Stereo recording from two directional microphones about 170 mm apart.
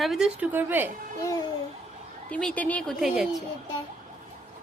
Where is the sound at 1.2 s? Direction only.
20° left (ahead or behind).